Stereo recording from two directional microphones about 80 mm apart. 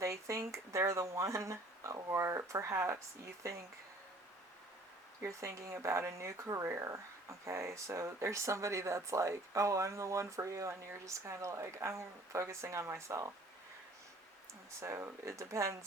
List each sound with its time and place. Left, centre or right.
0.0 s speech: right
5.2 s speech: right
14.8 s speech: right